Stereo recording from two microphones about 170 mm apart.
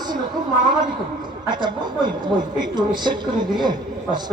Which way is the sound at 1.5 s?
25° right (ahead or behind).